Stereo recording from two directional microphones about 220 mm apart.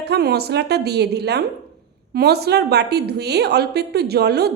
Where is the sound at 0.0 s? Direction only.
45° right (ahead or behind).